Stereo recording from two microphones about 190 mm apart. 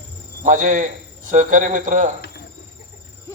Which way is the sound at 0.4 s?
40° right (ahead or behind).